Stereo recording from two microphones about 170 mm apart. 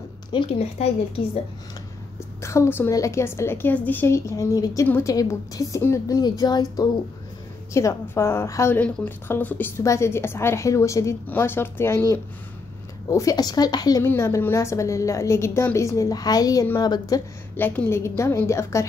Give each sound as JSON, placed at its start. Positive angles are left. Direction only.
{"t": 0.3, "sound": "a woman's voice", "side_deg": 35}
{"t": 2.1, "sound": "a woman's voice", "side_deg": 15}